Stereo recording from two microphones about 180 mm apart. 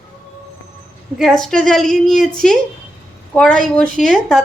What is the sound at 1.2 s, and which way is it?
A woman's voice, centre (ahead or behind).